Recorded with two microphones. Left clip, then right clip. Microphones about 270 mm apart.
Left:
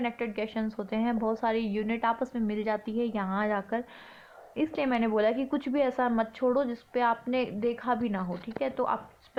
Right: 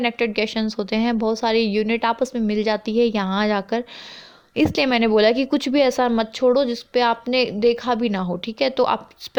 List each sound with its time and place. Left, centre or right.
0.0 s a woman's voice: right